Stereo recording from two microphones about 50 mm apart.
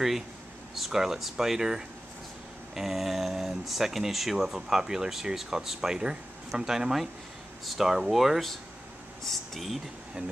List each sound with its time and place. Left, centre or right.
0.7 s speech: centre